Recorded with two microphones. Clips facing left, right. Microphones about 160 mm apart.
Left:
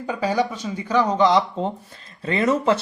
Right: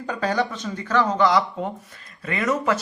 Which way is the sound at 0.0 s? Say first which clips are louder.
Left 2 dB; 10° left (ahead or behind).